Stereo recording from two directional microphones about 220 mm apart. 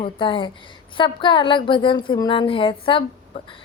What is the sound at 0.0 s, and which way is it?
A woman's voice, 25° left (ahead or behind).